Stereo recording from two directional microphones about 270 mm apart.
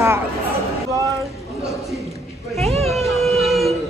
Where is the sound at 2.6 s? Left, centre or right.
Right.